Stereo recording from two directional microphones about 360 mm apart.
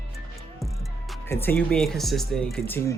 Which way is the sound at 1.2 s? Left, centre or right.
Centre.